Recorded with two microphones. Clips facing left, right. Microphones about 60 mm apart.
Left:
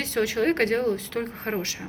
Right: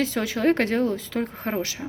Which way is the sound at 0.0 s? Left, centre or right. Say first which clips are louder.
Right 1 dB; left.